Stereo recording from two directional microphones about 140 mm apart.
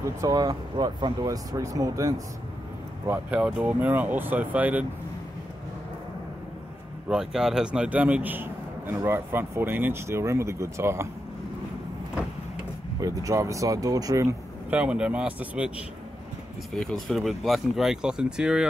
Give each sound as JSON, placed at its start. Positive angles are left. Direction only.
{"t": 0.2, "sound": "speech", "side_deg": -25}
{"t": 3.1, "sound": "a man's voice", "side_deg": -10}
{"t": 7.1, "sound": "a man's voice", "side_deg": -5}
{"t": 13.0, "sound": "speech", "side_deg": -25}
{"t": 14.7, "sound": "a man's voice", "side_deg": -10}
{"t": 16.7, "sound": "speech", "side_deg": 5}